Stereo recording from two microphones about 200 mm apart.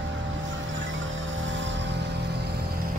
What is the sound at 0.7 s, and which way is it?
Music, 70° right (ahead or behind).